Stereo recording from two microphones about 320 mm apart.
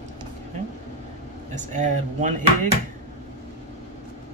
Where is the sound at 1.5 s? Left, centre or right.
Right.